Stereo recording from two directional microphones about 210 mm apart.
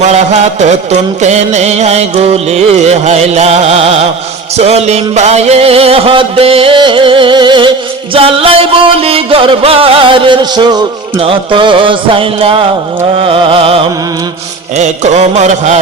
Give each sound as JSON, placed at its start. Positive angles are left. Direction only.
{"t": 0.6, "sound": "music", "side_deg": -35}